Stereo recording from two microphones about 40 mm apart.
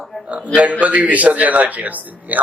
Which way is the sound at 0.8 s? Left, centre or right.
Right.